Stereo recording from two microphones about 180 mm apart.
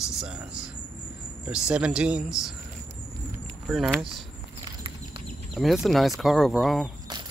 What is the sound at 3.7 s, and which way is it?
Speech, centre (ahead or behind).